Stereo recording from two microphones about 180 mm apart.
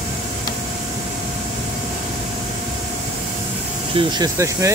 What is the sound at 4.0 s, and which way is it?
Speech, 20° right (ahead or behind).